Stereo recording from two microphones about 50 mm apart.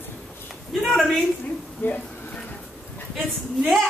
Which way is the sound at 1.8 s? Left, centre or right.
Left.